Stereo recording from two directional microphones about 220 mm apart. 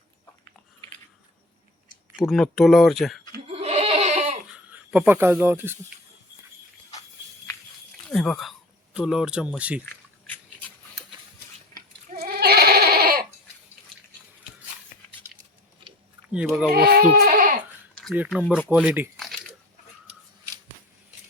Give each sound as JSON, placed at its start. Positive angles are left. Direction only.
{"t": 2.1, "sound": "speech", "side_deg": 0}
{"t": 3.4, "sound": "goat", "side_deg": -25}
{"t": 4.7, "sound": "speech", "side_deg": -5}
{"t": 8.1, "sound": "speech", "side_deg": 0}
{"t": 12.1, "sound": "goat", "side_deg": -45}
{"t": 16.3, "sound": "speech", "side_deg": -5}
{"t": 16.7, "sound": "speech", "side_deg": -45}
{"t": 17.9, "sound": "speech", "side_deg": 0}
{"t": 18.7, "sound": "crumpling", "side_deg": -10}